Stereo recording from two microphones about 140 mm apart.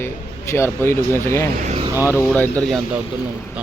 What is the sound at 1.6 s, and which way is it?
Vehicle, 45° right (ahead or behind).